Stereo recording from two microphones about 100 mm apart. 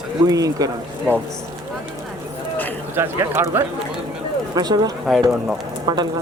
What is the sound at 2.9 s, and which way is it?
Speech, 25° right (ahead or behind).